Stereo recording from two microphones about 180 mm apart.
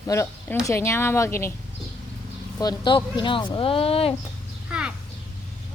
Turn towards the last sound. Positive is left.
turn(degrees=-5)  # may be behind; listen again after turning